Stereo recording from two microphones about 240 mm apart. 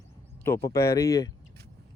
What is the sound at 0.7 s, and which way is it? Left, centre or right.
Speech, centre.